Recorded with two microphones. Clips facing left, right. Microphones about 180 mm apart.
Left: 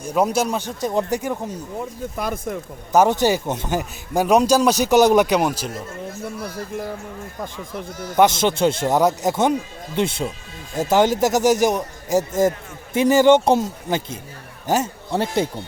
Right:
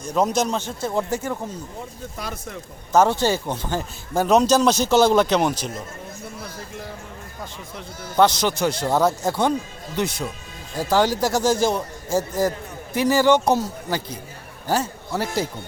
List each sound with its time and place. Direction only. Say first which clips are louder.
0.0 s speech: left 1 dB; 10° left (ahead or behind)
2.1 s speech: left 8 dB; 55° left (ahead or behind)
2.9 s speech: left 2 dB; 15° left (ahead or behind)
8.1 s speech: left 2 dB; 20° left (ahead or behind)